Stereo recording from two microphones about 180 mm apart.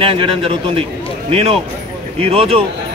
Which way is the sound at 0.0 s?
30° right (ahead or behind).